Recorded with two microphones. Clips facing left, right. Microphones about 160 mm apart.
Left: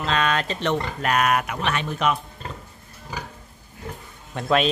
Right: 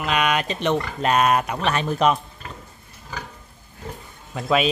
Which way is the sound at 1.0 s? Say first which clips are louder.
Right 3 dB; 25° right (ahead or behind).